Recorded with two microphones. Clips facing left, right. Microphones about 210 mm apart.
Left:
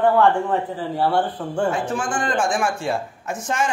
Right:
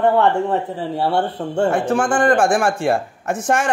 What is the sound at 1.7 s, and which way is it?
A man's voice, 65° right (ahead or behind).